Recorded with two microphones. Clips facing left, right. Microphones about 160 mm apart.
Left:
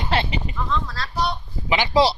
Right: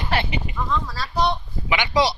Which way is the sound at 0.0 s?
25° left (ahead or behind).